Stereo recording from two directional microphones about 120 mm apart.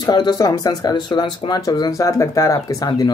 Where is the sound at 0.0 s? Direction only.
35° left (ahead or behind).